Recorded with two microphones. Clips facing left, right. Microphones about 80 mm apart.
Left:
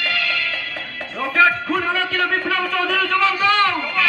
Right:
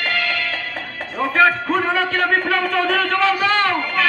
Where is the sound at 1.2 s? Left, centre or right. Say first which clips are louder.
Right 1 dB; right.